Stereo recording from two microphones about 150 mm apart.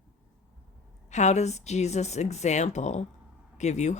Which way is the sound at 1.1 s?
50° left (ahead or behind).